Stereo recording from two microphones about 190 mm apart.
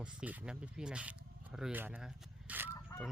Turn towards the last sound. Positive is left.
turn(degrees=15)  # may be behind; listen again after turning